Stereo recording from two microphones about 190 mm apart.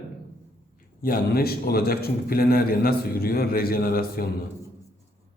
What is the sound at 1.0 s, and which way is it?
A man's voice, 50° left (ahead or behind).